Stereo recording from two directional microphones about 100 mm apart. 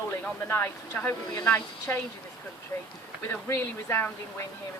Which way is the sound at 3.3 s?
25° left (ahead or behind).